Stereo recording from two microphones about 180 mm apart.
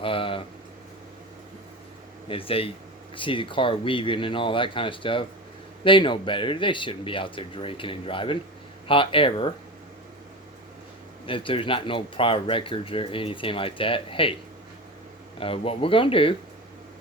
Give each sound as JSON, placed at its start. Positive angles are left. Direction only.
{"t": 0.0, "sound": "speech", "side_deg": 30}
{"t": 2.2, "sound": "speech", "side_deg": 30}
{"t": 11.3, "sound": "speech", "side_deg": 30}
{"t": 15.4, "sound": "speech", "side_deg": 30}